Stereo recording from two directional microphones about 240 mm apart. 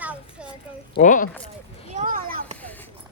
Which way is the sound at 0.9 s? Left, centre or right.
Left.